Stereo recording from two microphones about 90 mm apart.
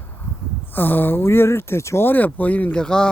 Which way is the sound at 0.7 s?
20° left (ahead or behind).